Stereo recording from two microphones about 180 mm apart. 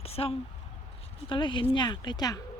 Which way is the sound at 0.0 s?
30° left (ahead or behind).